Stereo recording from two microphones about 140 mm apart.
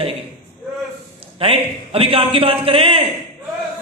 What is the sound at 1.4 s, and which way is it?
A man's voice, 40° right (ahead or behind).